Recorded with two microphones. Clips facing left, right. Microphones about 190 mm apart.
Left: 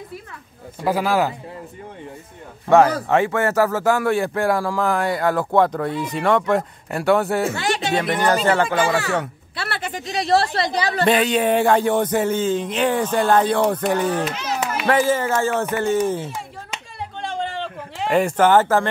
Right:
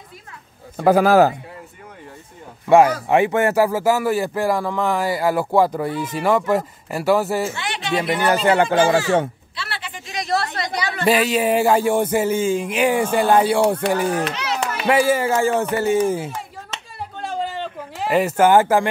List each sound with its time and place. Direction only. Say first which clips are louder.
0.7 s a man's voice: right 6 dB; 45° right (ahead or behind)
3.1 s speech: right 2 dB; 15° right (ahead or behind); by 7.4 s centre (ahead or behind)
7.5 s speech: left 6 dB; 45° left (ahead or behind)
8.0 s speech: right 3 dB; 10° right (ahead or behind)
8.6 s speech: right 4 dB; 30° right (ahead or behind)
9.6 s a sound: left 5 dB; 50° left (ahead or behind); by 11.1 s 35° left (ahead or behind)
11.1 s speech: right 1 dB; 5° right (ahead or behind)
14.3 s children playing: right 1 dB; 75° right (ahead or behind)
14.9 s speech: right 2 dB; 10° right (ahead or behind)
17.2 s a sound: right 1 dB; centre (ahead or behind)